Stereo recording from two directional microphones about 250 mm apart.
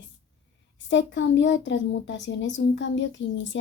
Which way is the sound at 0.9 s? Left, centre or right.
Left.